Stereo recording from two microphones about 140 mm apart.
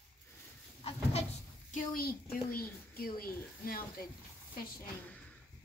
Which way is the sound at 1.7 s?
90° left.